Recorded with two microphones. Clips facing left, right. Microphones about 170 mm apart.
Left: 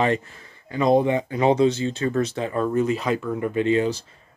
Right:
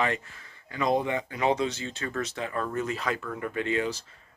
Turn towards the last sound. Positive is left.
turn(degrees=25)  # may be behind; listen again after turning